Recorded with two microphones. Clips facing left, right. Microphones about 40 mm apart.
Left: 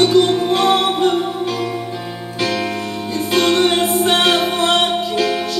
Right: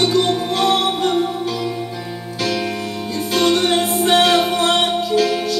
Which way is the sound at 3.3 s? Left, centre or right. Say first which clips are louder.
Left 1 dB; left.